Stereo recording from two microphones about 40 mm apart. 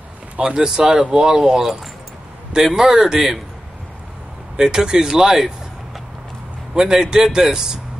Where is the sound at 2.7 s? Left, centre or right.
Centre.